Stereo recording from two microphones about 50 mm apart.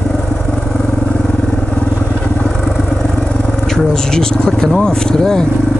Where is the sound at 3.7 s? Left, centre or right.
Centre.